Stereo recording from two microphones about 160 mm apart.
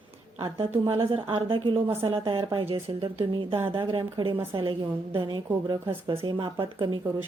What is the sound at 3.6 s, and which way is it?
Speech, 15° right (ahead or behind).